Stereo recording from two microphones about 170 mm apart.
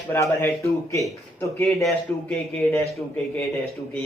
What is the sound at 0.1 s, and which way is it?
Speech, 15° left (ahead or behind).